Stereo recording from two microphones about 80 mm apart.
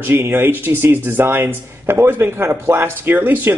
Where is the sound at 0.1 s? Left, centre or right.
Right.